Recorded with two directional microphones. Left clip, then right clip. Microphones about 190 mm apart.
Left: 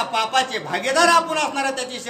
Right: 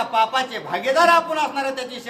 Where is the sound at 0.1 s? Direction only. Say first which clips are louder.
Right 2 dB; 10° left (ahead or behind).